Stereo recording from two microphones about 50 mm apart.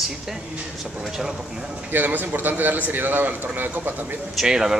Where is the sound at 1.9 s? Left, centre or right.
Right.